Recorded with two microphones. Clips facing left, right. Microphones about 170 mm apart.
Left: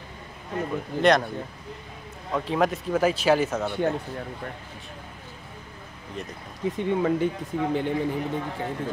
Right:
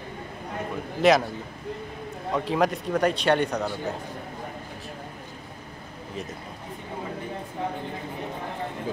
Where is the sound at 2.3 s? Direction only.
Centre (ahead or behind).